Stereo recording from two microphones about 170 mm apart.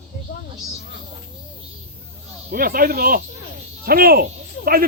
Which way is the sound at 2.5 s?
60° right (ahead or behind).